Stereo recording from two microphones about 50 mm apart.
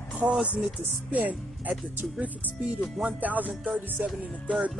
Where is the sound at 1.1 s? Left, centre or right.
Right.